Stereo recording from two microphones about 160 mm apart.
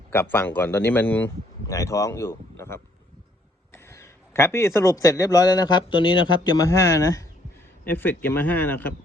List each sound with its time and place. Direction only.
0.1 s speech: 15° left (ahead or behind)